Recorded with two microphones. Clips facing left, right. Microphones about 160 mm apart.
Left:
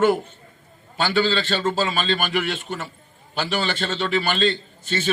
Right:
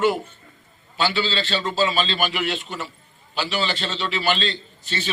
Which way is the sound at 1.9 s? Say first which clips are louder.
Even; 55° left (ahead or behind).